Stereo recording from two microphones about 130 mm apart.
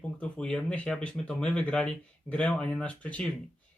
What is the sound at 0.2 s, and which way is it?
Speech, 5° left (ahead or behind).